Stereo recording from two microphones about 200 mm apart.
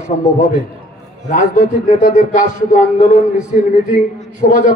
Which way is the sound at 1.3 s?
40° left (ahead or behind).